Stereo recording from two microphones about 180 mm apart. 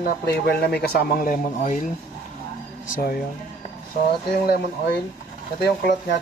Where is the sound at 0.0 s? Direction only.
60° left (ahead or behind).